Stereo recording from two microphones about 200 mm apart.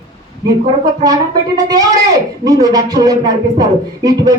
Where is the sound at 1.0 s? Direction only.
20° right (ahead or behind).